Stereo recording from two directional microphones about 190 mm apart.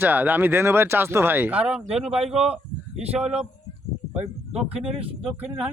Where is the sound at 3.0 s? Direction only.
35° right (ahead or behind).